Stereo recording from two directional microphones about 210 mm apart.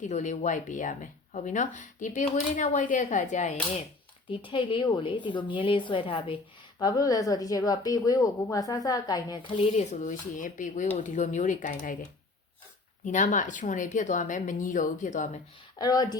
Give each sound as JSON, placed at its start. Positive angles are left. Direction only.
{"t": 0.0, "sound": "speech", "side_deg": 35}
{"t": 4.3, "sound": "a woman's voice", "side_deg": 25}
{"t": 13.1, "sound": "speech", "side_deg": 35}
{"t": 15.8, "sound": "a woman's voice", "side_deg": 20}